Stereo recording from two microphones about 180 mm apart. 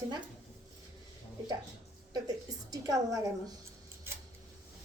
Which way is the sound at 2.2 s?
20° right (ahead or behind).